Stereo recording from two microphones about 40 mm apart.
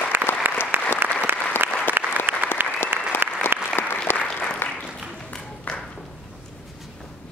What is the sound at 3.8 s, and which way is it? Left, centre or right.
Applause, left.